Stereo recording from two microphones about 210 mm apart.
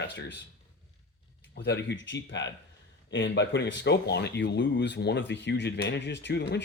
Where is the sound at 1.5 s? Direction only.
55° left (ahead or behind).